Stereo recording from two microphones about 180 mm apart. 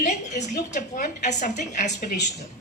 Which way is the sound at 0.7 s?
45° left (ahead or behind).